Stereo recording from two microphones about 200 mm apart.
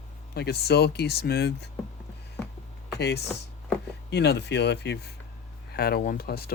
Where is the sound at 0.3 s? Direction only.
55° left (ahead or behind).